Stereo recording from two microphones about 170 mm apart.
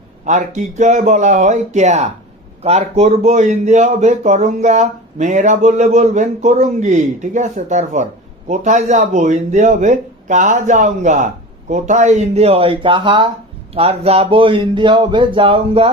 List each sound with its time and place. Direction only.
0.3 s speech: 45° right (ahead or behind)